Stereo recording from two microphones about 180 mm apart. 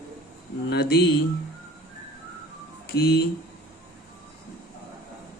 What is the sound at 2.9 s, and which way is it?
Speech, 60° left (ahead or behind).